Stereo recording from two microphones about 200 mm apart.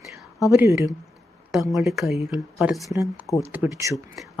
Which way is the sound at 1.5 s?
Centre (ahead or behind).